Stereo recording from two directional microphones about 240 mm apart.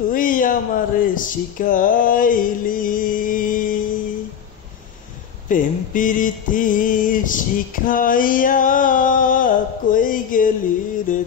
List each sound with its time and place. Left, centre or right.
0.1 s speech: left
5.5 s mantra: left